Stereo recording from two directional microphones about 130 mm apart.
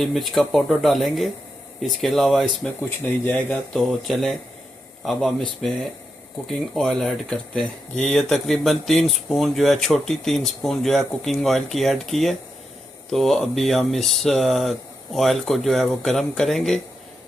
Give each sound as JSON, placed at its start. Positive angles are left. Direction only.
{"t": 0.0, "sound": "speech", "side_deg": 0}